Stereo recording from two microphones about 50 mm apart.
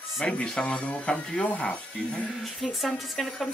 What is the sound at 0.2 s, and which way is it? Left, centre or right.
Speech, centre.